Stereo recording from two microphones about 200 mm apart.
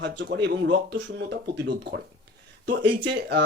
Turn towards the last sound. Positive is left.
turn(degrees=-60)  # may be behind; listen again after turning